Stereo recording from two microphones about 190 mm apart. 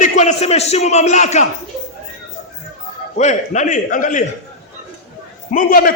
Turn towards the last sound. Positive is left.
turn(degrees=50)  # may be behind; listen again after turning